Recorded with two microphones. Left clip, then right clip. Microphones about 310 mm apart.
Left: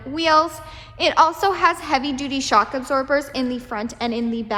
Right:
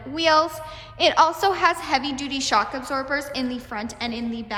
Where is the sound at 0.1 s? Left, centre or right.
Centre.